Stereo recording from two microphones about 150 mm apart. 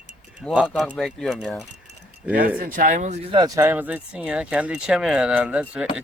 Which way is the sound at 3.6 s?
10° right (ahead or behind).